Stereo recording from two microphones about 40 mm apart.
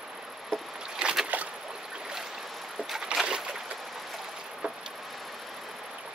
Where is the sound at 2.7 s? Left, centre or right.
Centre.